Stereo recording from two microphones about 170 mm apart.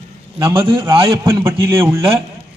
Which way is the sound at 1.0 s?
15° right (ahead or behind).